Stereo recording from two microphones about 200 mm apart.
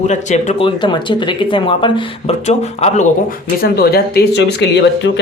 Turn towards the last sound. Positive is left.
turn(degrees=60)  # may be behind; listen again after turning